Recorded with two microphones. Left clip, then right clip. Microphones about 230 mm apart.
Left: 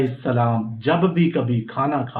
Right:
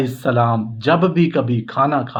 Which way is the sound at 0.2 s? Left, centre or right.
Right.